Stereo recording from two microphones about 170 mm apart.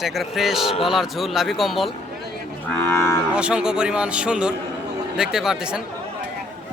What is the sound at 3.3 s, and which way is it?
Speech, 5° right (ahead or behind).